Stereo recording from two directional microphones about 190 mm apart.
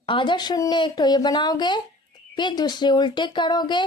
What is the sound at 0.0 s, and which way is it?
Speech, 25° left (ahead or behind).